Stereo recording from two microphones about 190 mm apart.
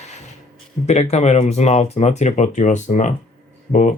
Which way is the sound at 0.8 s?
35° left (ahead or behind).